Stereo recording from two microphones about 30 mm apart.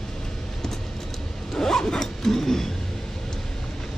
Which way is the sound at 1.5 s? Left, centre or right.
Centre.